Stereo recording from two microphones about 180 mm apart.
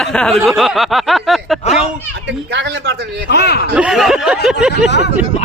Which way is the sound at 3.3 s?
65° left (ahead or behind).